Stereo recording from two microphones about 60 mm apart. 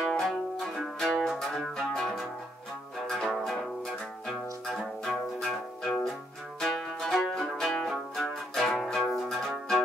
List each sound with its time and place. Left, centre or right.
0.0 s music: centre
9.1 s zither: centre